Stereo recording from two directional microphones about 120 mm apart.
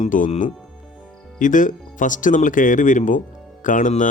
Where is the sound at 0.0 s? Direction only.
90° left.